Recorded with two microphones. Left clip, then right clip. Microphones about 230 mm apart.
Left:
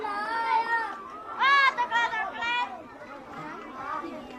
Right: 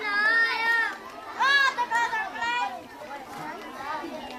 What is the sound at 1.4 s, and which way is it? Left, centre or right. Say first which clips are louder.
Children playing: even; right.